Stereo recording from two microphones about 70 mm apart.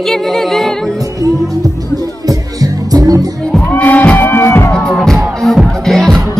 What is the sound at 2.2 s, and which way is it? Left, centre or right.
Music, right.